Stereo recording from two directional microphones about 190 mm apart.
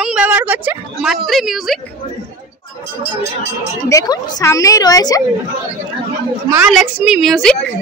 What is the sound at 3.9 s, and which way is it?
A woman's voice, 20° left (ahead or behind).